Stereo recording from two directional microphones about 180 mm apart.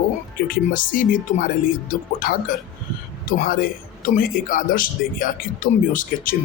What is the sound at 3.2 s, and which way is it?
Speech, 55° left (ahead or behind).